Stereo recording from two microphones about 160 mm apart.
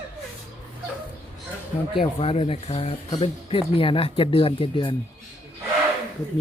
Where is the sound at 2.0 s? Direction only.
35° left (ahead or behind).